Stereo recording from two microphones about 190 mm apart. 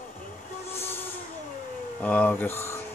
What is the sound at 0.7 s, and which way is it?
Train, 15° left (ahead or behind).